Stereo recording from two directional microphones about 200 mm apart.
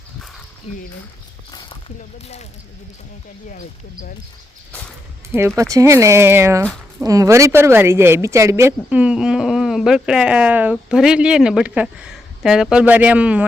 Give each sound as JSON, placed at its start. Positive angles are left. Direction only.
{"t": 1.5, "sound": "a sound", "side_deg": 20}
{"t": 2.1, "sound": "speech", "side_deg": 30}
{"t": 5.5, "sound": "speech", "side_deg": -15}